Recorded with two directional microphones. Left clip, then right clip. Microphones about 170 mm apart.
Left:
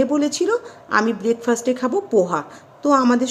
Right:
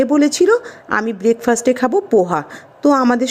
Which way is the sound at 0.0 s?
40° right (ahead or behind).